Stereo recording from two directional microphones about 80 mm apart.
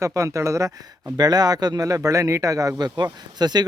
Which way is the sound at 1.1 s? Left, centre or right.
Right.